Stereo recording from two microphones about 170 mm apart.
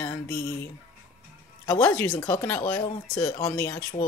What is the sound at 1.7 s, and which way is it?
Speech, 15° left (ahead or behind).